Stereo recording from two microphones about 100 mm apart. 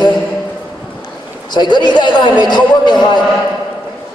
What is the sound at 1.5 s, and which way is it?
A man's voice, 45° left (ahead or behind).